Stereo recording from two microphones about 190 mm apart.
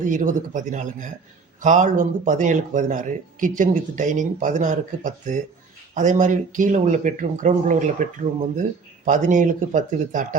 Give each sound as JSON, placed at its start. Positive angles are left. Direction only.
{"t": 0.0, "sound": "speech", "side_deg": -40}
{"t": 9.0, "sound": "speech", "side_deg": -40}